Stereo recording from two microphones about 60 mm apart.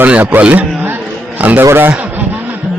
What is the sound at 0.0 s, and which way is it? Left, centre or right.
A man's voice, right.